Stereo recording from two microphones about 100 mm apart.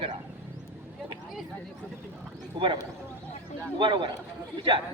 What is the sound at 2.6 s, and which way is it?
Speech, 45° right (ahead or behind).